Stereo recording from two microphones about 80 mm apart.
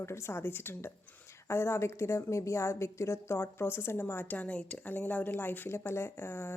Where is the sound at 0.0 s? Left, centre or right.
Left.